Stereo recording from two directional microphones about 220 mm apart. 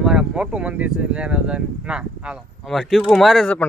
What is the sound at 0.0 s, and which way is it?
Speech, 5° right (ahead or behind).